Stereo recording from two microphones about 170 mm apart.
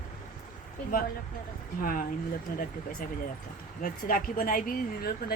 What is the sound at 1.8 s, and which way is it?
Speech, 60° left (ahead or behind).